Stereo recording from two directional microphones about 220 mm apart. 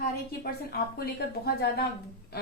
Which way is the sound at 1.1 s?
50° left (ahead or behind).